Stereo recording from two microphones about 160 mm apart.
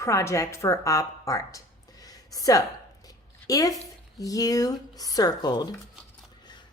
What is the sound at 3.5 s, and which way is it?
Speech, 20° left (ahead or behind).